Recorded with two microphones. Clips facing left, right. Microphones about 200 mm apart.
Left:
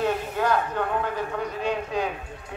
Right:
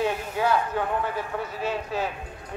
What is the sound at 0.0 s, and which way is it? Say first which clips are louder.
A man's voice: left 1 dB; 10° right (ahead or behind).